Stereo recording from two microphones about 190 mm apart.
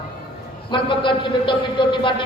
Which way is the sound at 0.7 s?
25° left (ahead or behind).